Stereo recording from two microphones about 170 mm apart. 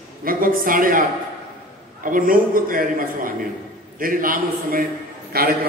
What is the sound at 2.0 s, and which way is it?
A man's voice, 55° right (ahead or behind).